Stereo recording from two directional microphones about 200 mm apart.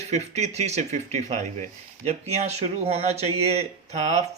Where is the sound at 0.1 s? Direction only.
35° right (ahead or behind).